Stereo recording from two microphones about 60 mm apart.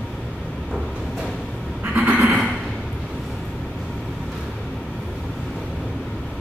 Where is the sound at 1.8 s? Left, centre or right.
Right.